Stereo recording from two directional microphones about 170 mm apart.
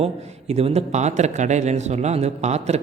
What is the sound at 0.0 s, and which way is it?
Speech, 35° right (ahead or behind).